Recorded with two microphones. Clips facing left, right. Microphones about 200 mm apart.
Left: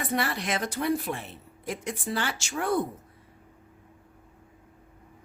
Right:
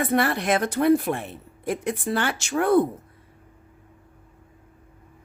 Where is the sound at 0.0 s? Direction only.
55° right (ahead or behind).